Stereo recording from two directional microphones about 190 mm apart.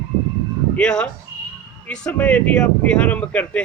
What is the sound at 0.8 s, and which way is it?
Speech, 5° left (ahead or behind).